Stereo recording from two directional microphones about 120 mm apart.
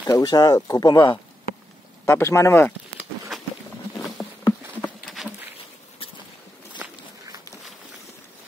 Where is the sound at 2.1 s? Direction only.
25° left (ahead or behind).